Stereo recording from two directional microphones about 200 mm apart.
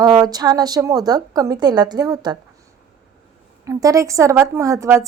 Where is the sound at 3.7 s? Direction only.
15° right (ahead or behind).